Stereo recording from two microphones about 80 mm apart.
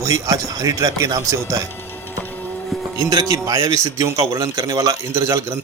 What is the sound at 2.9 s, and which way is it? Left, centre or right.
Speech, right.